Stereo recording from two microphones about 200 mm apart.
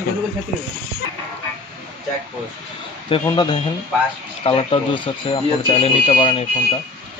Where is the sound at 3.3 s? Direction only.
25° left (ahead or behind).